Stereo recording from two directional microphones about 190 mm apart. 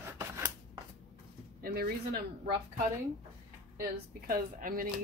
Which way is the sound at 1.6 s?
55° right (ahead or behind).